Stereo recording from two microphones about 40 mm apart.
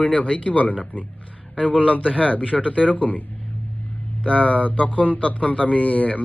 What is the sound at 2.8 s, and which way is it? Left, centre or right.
A man's voice, left.